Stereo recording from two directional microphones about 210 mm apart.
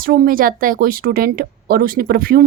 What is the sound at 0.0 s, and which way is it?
A woman's voice, 45° right (ahead or behind).